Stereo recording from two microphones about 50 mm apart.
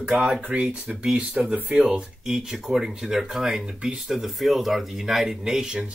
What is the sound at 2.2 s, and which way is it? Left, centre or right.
Speech, centre.